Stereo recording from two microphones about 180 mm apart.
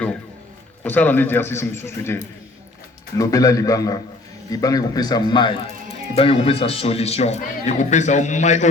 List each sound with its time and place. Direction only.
0.9 s a man's voice: 10° left (ahead or behind); by 8.7 s 40° left (ahead or behind)